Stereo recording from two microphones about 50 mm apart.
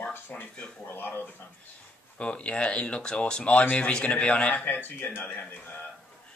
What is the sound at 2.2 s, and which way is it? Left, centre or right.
A man's voice, left.